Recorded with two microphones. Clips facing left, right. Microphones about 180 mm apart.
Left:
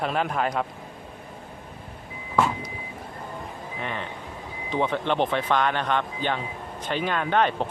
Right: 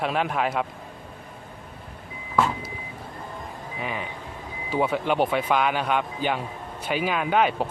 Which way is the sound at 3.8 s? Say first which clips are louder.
Right 1 dB; 5° right (ahead or behind).